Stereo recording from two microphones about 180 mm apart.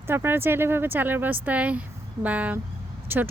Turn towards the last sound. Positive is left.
turn(degrees=-10)  # may be behind; listen again after turning